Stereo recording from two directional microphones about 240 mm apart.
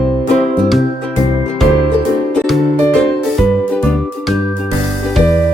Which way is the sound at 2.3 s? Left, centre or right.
Centre.